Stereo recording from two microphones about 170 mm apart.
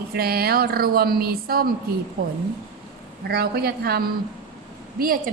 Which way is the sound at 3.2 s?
65° right (ahead or behind).